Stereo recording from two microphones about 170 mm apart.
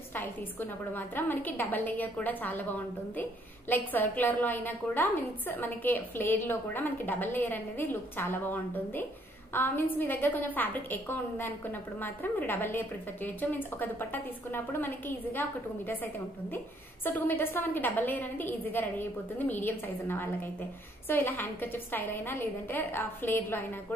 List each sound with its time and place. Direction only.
0.1 s a woman's voice: 10° left (ahead or behind)
17.0 s a woman's voice: 10° left (ahead or behind)